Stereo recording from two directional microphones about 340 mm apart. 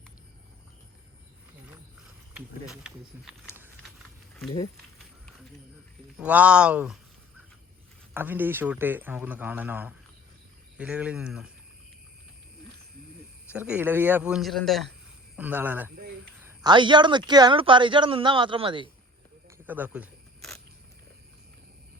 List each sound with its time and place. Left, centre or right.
2.3 s a man's voice: centre
4.4 s speech: centre
6.1 s a man's voice: centre
8.1 s a man's voice: centre
13.5 s a man's voice: centre
19.5 s single-lens reflex camera: centre